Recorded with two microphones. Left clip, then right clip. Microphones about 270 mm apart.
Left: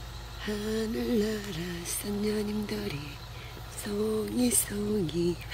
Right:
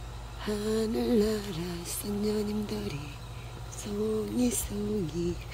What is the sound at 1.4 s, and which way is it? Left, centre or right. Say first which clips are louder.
Speech: even; right.